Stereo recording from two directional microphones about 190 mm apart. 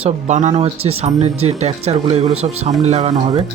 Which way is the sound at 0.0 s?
40° right (ahead or behind).